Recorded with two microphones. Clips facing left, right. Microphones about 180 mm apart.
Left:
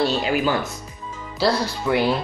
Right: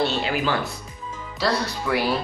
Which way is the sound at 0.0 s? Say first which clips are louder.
Left 3 dB; 40° left (ahead or behind).